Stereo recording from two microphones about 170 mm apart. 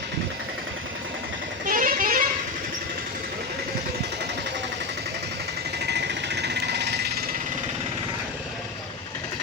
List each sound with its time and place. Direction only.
1.6 s vehicle: 55° right (ahead or behind)
5.8 s jackhammer: 85° right